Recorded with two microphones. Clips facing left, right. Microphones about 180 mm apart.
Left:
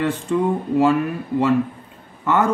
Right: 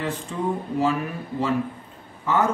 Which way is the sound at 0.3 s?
60° left (ahead or behind).